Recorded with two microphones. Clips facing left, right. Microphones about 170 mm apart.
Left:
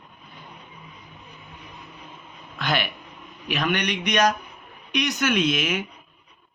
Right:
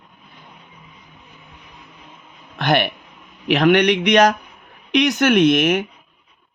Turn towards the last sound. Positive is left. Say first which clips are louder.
# right 9 dB
turn(degrees=-55)  # may be behind; listen again after turning